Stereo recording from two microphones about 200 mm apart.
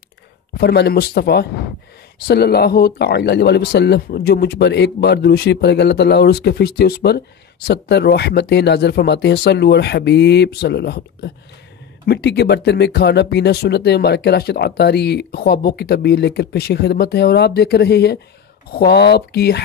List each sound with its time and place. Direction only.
0.6 s speech: 55° left (ahead or behind)